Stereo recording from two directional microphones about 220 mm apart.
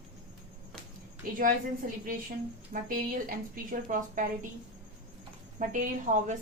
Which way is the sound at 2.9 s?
40° right (ahead or behind).